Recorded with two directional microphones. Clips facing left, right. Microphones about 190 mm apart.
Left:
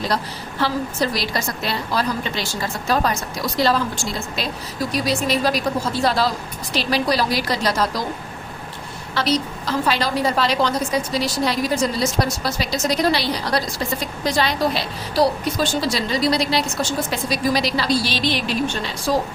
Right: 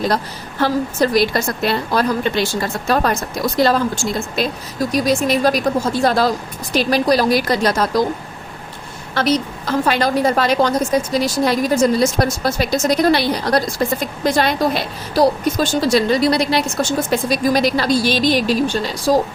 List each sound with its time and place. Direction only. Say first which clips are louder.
0.6 s a woman's voice: right 5 dB; 50° right (ahead or behind)
3.6 s a woman's voice: right 4 dB; 45° right (ahead or behind)
9.1 s a woman's voice: right 4 dB; 50° right (ahead or behind)